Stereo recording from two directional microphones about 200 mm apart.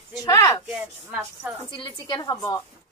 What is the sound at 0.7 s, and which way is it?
Speech, 5° right (ahead or behind).